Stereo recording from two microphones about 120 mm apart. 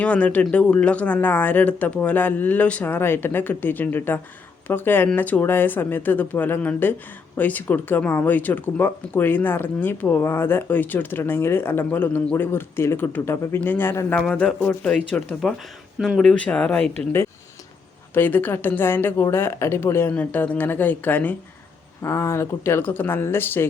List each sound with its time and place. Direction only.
0.0 s speech: 10° left (ahead or behind)
14.2 s speech: 10° left (ahead or behind)
18.1 s speech: 15° left (ahead or behind)